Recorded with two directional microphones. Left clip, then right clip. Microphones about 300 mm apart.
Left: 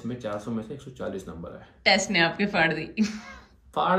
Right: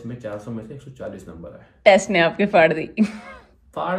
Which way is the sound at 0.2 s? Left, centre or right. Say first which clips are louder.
Right 2 dB; centre.